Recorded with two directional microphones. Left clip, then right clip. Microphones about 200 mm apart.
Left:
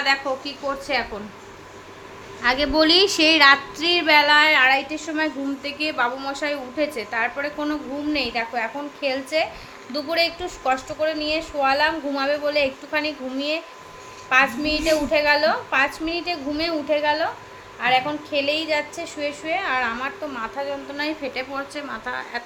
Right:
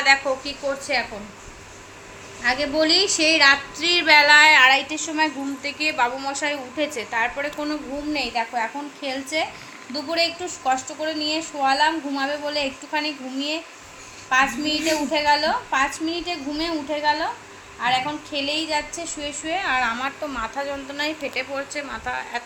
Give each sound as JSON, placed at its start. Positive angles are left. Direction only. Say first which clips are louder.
{"t": 0.0, "sound": "speech", "louder": "right 3 dB", "side_deg": 15}
{"t": 0.9, "sound": "a woman's voice", "louder": "even", "side_deg": 25}
{"t": 2.4, "sound": "a woman's voice", "louder": "left 2 dB", "side_deg": 35}
{"t": 3.8, "sound": "a woman's voice", "louder": "right 2 dB", "side_deg": 15}